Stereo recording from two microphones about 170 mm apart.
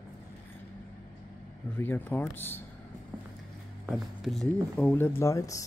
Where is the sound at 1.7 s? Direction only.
10° left (ahead or behind).